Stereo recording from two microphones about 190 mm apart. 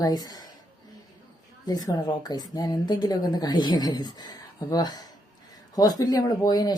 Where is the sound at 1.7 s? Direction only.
20° left (ahead or behind).